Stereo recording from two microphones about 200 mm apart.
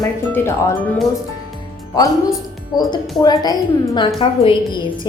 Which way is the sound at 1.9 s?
20° left (ahead or behind).